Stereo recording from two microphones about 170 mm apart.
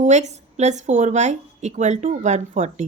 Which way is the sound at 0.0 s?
45° right (ahead or behind).